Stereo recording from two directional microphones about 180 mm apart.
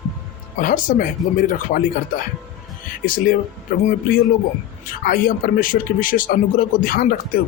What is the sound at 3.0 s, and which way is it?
Speech, 50° left (ahead or behind).